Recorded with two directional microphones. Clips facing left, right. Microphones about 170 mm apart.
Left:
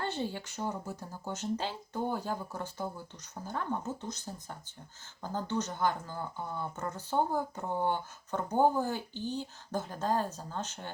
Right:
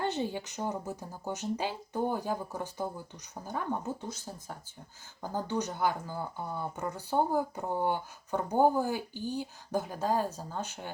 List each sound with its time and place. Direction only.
0.0 s speech: 15° right (ahead or behind)